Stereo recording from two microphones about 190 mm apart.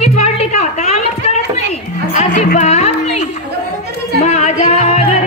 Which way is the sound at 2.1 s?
40° left (ahead or behind).